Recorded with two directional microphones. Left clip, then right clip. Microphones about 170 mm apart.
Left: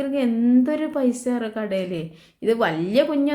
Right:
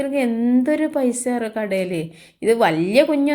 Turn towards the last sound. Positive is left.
turn(degrees=-15)  # may be behind; listen again after turning